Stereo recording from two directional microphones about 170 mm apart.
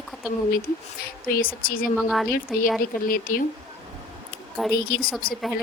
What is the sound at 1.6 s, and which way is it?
Speech, 55° left (ahead or behind).